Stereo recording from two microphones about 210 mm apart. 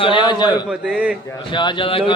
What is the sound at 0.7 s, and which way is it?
Speech, 5° right (ahead or behind).